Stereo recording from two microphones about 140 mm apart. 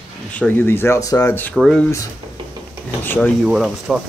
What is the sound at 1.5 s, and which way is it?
Speech, 5° left (ahead or behind).